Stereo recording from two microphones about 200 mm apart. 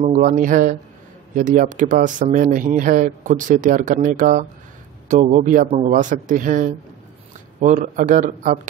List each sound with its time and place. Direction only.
0.0 s speech: 35° right (ahead or behind)